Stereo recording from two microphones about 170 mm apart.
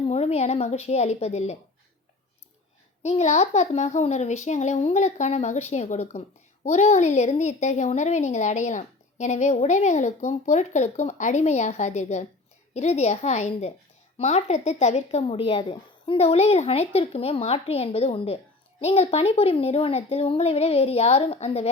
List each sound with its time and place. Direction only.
0.1 s a woman's voice: 40° left (ahead or behind)
3.0 s a woman's voice: 40° left (ahead or behind)